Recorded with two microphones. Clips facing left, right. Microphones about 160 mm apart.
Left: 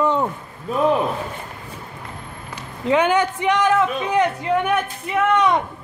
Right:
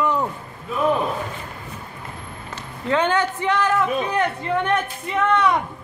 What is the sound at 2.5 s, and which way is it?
A man's voice, 15° left (ahead or behind).